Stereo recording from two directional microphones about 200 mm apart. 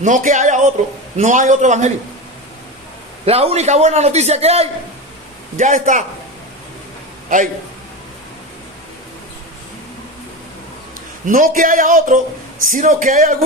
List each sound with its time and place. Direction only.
0.0 s a man's voice: 40° right (ahead or behind)
3.2 s a man's voice: 30° right (ahead or behind)
7.3 s a man's voice: 40° right (ahead or behind)
11.3 s speech: 45° right (ahead or behind)